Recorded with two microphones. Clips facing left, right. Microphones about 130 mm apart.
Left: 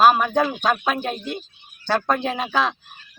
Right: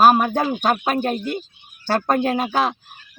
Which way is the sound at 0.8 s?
50° right (ahead or behind).